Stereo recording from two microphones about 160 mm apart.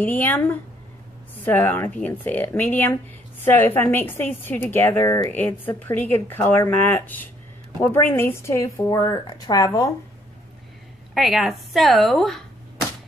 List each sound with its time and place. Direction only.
0.0 s a woman's voice: 10° left (ahead or behind)
11.1 s a woman's voice: centre (ahead or behind)